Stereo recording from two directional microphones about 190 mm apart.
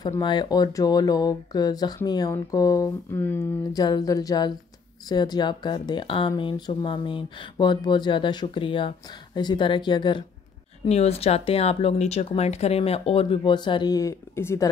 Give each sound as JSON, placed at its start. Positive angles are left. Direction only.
{"t": 0.0, "sound": "speech", "side_deg": 20}